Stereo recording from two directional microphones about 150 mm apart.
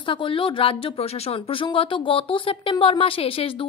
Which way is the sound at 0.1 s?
35° left (ahead or behind).